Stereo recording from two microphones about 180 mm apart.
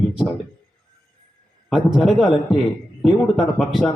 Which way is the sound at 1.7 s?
Centre (ahead or behind).